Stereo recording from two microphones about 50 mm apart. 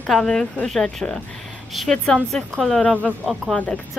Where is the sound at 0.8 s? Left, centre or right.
Centre.